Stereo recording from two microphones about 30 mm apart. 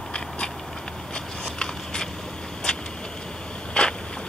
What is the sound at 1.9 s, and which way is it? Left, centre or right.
Vehicle, left.